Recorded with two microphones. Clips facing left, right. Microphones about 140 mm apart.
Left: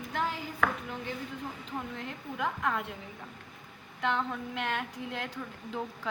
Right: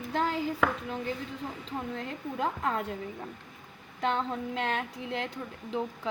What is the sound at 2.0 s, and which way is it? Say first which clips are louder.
Speech: right 4 dB; 30° right (ahead or behind).